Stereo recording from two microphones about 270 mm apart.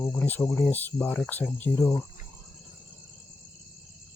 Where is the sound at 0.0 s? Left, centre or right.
Centre.